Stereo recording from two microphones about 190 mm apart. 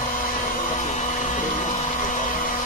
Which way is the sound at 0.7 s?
40° left (ahead or behind).